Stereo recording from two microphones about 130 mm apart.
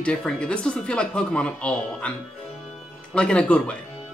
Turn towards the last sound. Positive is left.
turn(degrees=10)  # may be behind; listen again after turning